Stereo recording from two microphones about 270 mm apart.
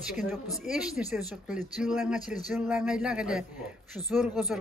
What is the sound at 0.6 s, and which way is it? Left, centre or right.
Speech, centre.